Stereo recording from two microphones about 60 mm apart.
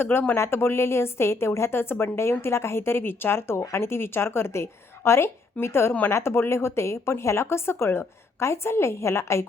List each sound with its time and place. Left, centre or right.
0.0 s a woman's voice: left